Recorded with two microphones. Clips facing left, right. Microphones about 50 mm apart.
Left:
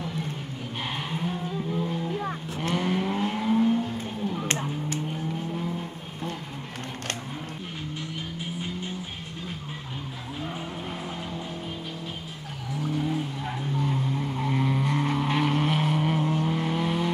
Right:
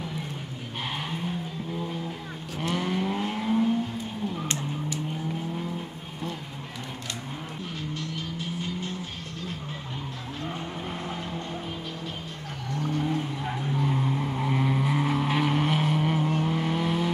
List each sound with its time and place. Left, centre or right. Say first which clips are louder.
0.9 s vehicle: left 1 dB; centre
4.5 s vehicle: left 2 dB; left
8.5 s vehicle: even; centre
12.7 s vehicle: even; centre